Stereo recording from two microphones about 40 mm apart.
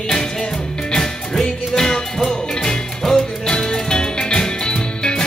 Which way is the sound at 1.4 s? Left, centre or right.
Centre.